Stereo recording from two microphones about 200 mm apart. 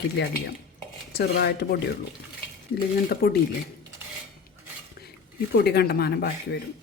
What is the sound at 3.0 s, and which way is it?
Speech, 50° left (ahead or behind).